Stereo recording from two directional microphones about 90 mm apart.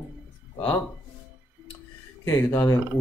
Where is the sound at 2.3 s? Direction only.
25° left (ahead or behind).